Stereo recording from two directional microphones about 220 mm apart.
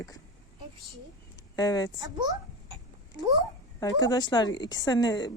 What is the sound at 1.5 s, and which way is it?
Speech, 20° left (ahead or behind).